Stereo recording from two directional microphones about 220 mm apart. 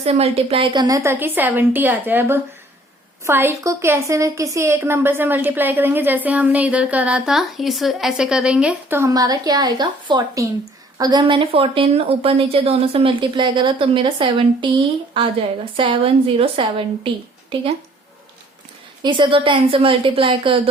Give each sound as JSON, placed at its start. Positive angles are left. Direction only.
{"t": 0.0, "sound": "a woman's voice", "side_deg": -30}
{"t": 19.0, "sound": "speech", "side_deg": -20}